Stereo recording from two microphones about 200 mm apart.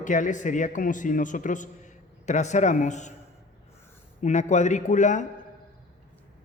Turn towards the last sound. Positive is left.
turn(degrees=40)  # may be behind; listen again after turning